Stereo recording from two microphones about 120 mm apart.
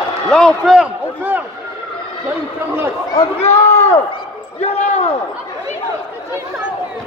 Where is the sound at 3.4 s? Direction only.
65° left (ahead or behind).